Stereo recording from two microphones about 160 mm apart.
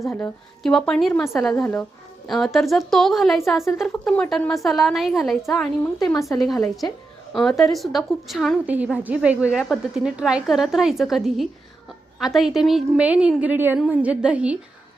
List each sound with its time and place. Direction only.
0.0 s a woman's voice: 15° left (ahead or behind)
0.6 s a woman's voice: 5° left (ahead or behind)